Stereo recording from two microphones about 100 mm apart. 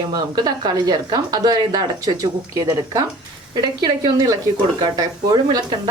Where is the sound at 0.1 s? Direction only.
45° right (ahead or behind).